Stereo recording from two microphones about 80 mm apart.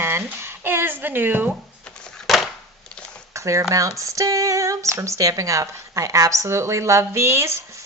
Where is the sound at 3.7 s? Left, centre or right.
Right.